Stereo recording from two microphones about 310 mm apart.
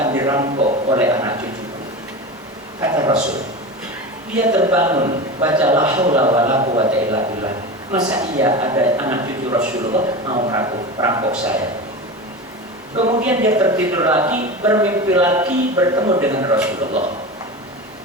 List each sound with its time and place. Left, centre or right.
0.0 s a man's voice: centre
2.8 s a sound: centre
4.5 s speech: centre
13.0 s speech: centre
13.2 s speech: centre